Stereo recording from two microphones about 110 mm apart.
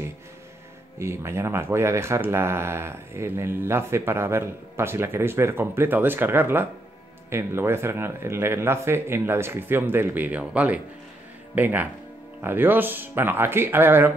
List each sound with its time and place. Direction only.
0.9 s speech: 25° right (ahead or behind)